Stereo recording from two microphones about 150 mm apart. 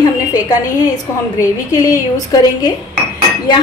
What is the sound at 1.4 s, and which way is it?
Speech, 20° left (ahead or behind).